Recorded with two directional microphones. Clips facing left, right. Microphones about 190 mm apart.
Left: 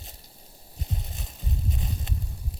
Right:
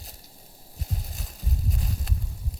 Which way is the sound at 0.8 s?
Centre (ahead or behind).